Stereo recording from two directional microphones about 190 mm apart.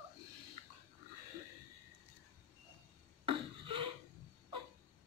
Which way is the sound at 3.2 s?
25° right (ahead or behind).